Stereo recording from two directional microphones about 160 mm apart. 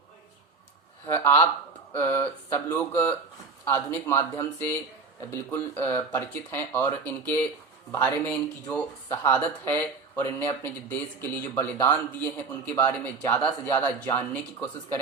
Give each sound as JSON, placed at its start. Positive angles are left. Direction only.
{"t": 1.0, "sound": "speech", "side_deg": 20}